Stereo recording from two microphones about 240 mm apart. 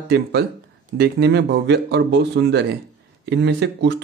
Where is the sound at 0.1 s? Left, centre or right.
Right.